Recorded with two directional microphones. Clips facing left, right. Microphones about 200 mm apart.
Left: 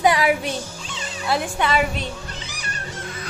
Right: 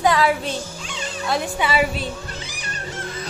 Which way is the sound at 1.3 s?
Centre (ahead or behind).